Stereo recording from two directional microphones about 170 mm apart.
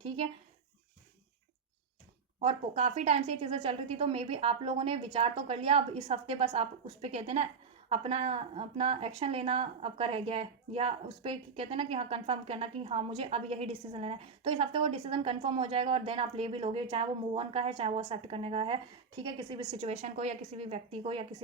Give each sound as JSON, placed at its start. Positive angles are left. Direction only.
{"t": 2.4, "sound": "speech", "side_deg": -35}